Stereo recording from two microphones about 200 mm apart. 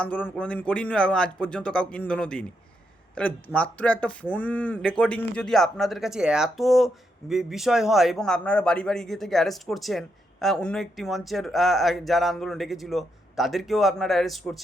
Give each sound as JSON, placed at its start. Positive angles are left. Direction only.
{"t": 0.0, "sound": "speech", "side_deg": 5}